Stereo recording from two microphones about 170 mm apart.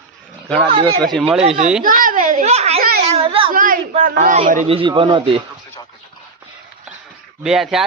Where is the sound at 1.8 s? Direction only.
55° right (ahead or behind).